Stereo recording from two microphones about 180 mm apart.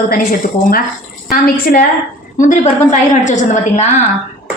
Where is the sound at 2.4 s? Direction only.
45° left (ahead or behind).